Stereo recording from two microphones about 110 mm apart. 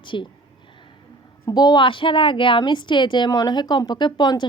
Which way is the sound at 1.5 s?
40° left (ahead or behind).